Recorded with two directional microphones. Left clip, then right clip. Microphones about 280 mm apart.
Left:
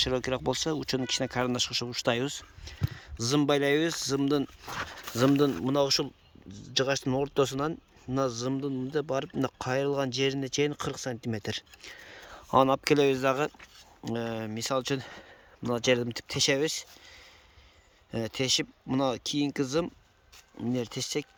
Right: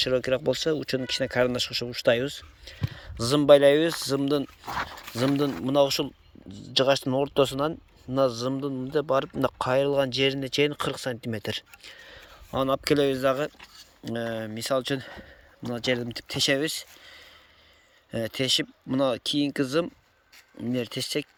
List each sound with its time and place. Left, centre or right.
0.0 s speech: centre
4.6 s speech: centre
5.2 s speech: centre
6.5 s speech: left
6.7 s speech: centre